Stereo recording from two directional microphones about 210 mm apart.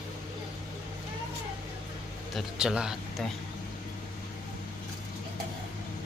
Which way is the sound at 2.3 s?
5° right (ahead or behind).